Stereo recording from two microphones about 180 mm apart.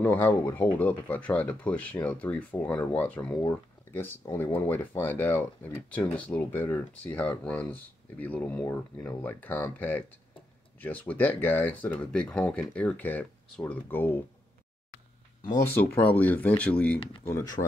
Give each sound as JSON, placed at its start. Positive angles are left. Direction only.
{"t": 0.0, "sound": "speech", "side_deg": 10}
{"t": 15.7, "sound": "speech", "side_deg": 10}
{"t": 17.3, "sound": "speech", "side_deg": 15}